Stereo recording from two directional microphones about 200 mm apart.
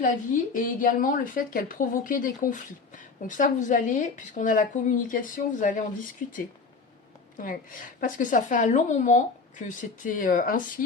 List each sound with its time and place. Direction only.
0.0 s a woman's voice: 40° left (ahead or behind)
7.3 s a woman's voice: 40° left (ahead or behind)